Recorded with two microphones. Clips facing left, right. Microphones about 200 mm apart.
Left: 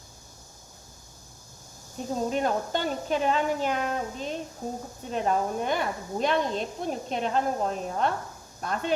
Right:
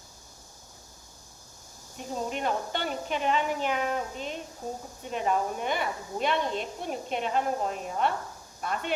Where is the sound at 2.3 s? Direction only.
40° left (ahead or behind).